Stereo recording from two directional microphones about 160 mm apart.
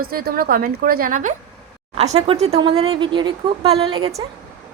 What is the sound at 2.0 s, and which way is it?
Speech, 40° right (ahead or behind).